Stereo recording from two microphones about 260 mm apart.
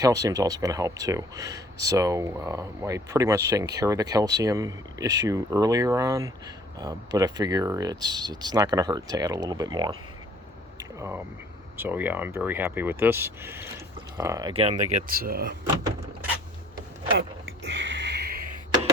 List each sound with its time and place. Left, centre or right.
0.0 s speech: centre
11.8 s speech: centre; by 15.5 s right
17.2 s a sound: right